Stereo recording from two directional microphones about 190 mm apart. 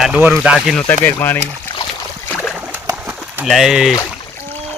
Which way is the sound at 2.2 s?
Centre (ahead or behind).